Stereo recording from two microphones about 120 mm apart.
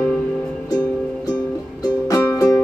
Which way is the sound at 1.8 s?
30° left (ahead or behind).